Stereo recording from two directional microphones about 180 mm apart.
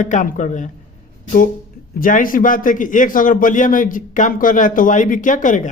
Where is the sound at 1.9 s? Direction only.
50° left (ahead or behind).